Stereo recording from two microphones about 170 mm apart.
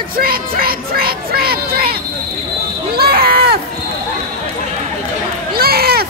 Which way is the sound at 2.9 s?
70° right (ahead or behind).